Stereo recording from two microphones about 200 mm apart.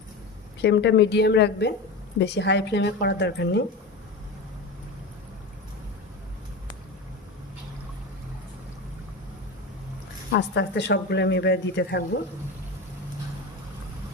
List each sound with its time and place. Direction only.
0.6 s speech: 60° left (ahead or behind)
10.3 s speech: 60° left (ahead or behind)